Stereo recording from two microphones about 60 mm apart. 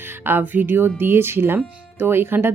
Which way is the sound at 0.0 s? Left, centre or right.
Right.